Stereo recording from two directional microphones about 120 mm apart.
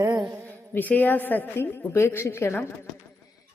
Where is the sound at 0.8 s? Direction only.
15° left (ahead or behind).